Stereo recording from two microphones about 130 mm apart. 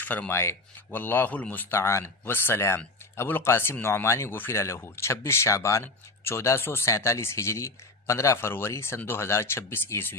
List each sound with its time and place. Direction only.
0.0 s speech: 15° left (ahead or behind)